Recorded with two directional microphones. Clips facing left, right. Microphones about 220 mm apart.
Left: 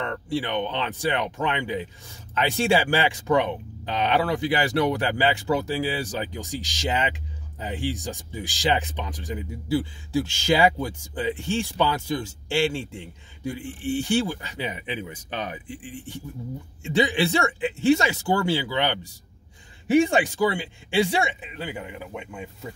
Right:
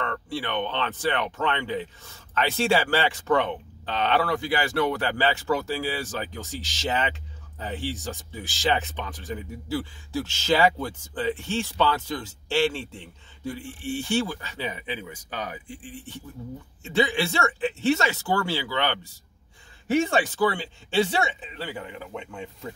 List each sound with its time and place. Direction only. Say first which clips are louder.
0.0 s speech: left 3 dB; 15° left (ahead or behind)